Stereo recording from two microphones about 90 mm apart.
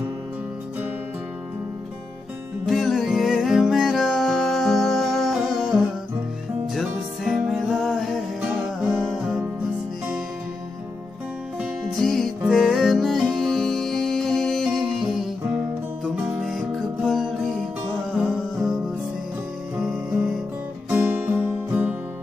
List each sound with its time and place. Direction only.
2.6 s music: centre (ahead or behind)
11.6 s music: centre (ahead or behind)
20.9 s music: 20° right (ahead or behind)